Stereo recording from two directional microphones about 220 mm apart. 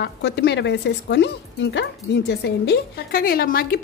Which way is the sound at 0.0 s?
50° left (ahead or behind).